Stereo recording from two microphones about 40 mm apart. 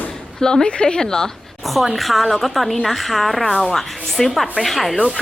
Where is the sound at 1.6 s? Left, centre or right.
Centre.